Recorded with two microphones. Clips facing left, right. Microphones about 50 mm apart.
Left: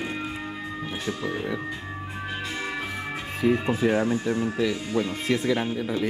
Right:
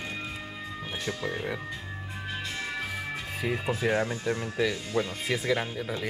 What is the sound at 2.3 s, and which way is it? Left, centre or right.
Music, centre.